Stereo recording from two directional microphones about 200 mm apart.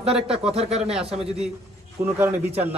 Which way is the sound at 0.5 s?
30° right (ahead or behind).